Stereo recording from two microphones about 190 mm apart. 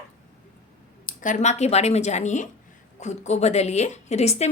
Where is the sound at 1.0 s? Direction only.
40° left (ahead or behind).